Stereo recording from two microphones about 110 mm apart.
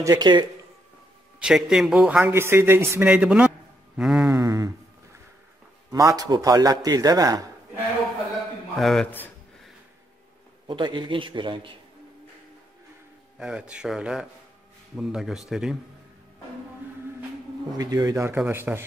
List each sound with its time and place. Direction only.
0.0 s a man's voice: 40° right (ahead or behind)
1.4 s speech: 5° right (ahead or behind)
2.2 s a man's voice: 20° right (ahead or behind)
4.3 s speech: 30° right (ahead or behind)
5.9 s a man's voice: 35° right (ahead or behind)
8.7 s speech: centre (ahead or behind)
10.7 s a man's voice: 45° right (ahead or behind)
13.4 s a man's voice: 5° right (ahead or behind)
17.7 s a man's voice: 35° right (ahead or behind)
18.3 s speech: 20° right (ahead or behind)